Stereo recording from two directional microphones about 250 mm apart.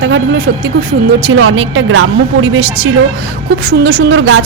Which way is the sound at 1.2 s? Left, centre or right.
Right.